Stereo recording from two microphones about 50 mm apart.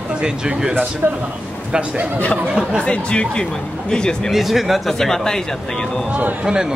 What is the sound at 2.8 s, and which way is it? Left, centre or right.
Speech, left.